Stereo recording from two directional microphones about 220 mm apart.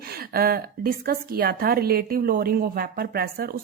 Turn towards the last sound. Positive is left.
turn(degrees=-45)  # may be behind; listen again after turning